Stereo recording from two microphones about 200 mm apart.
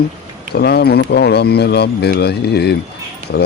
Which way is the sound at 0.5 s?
55° left (ahead or behind).